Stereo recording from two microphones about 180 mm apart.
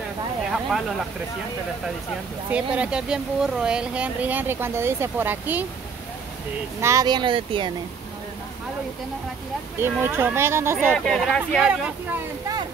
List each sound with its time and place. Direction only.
0.5 s speech: centre (ahead or behind)
2.5 s speech: 5° right (ahead or behind)
6.8 s speech: 15° right (ahead or behind)
9.8 s speech: 10° right (ahead or behind)
10.9 s speech: centre (ahead or behind)